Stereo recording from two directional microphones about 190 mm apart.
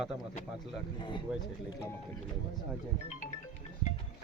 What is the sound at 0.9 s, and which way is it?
Speech, 25° left (ahead or behind).